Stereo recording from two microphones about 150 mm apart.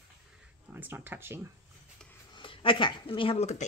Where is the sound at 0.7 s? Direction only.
15° right (ahead or behind).